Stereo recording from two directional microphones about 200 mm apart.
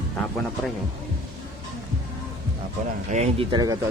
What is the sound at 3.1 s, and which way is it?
Speech, 35° right (ahead or behind).